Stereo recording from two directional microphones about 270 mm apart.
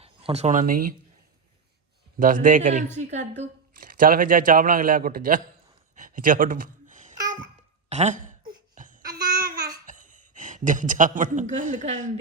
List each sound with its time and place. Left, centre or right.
0.0 s speech: right
2.1 s speech: right
6.0 s a sound: right
7.9 s laughter: right
9.0 s babbling: centre
9.8 s a man's voice: right